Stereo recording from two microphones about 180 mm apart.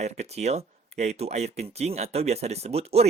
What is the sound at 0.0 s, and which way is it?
Speech, 35° right (ahead or behind).